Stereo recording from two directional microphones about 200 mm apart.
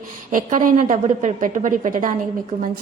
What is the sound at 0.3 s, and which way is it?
A woman's voice, 40° right (ahead or behind).